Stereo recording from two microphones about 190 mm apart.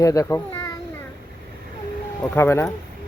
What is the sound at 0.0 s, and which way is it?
Speech, 20° left (ahead or behind).